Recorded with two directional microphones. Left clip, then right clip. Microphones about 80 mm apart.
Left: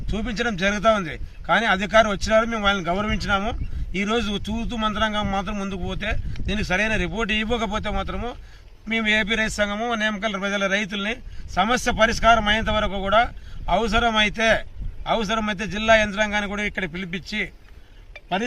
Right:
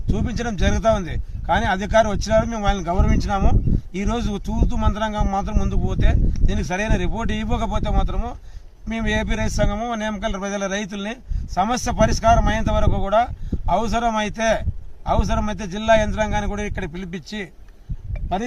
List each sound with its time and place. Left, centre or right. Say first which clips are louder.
0.1 s speech: left 1 dB; centre